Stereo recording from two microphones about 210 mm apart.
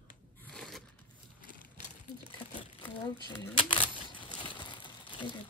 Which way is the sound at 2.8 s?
25° left (ahead or behind).